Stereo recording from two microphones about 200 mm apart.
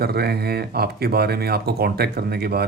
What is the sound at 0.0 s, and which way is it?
Speech, 50° right (ahead or behind).